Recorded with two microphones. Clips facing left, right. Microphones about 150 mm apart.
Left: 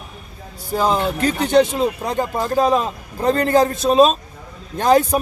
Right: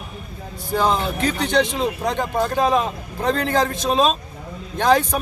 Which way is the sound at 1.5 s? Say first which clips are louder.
Left 6 dB; 10° left (ahead or behind).